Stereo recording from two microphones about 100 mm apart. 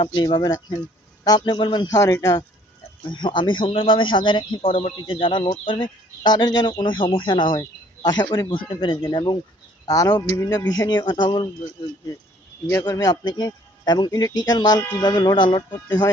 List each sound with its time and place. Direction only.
0.0 s speech: 50° left (ahead or behind)
1.9 s speech: 30° left (ahead or behind)
3.1 s speech: 50° left (ahead or behind); by 4.9 s 70° left (ahead or behind)
4.9 s speech: 55° left (ahead or behind)
6.3 s speech: 45° left (ahead or behind)
12.8 s speech: 40° left (ahead or behind)